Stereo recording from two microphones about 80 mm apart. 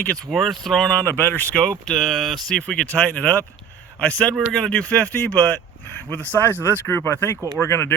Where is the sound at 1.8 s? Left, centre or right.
Centre.